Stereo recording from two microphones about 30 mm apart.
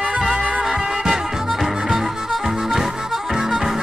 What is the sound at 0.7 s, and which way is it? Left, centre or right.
Music, right.